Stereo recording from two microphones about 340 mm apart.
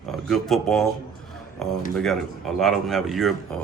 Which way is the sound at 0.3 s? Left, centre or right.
Centre.